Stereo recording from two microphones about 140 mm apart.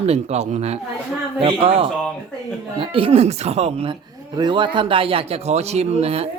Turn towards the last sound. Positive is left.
turn(degrees=-45)  # may be behind; listen again after turning